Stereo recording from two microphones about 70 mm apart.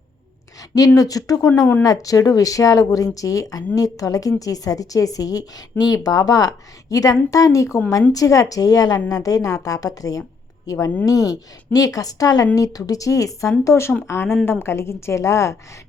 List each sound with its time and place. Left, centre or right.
0.9 s a woman's voice: left
13.7 s a woman's voice: left